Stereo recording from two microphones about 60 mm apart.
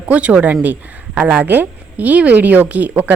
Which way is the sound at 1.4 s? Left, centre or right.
Right.